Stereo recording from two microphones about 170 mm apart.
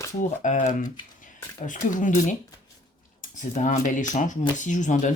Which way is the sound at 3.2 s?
50° left (ahead or behind).